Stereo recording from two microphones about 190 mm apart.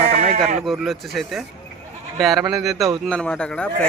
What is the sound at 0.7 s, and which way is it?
Speech, centre (ahead or behind).